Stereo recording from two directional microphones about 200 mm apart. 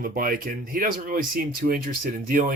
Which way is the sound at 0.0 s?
45° right (ahead or behind).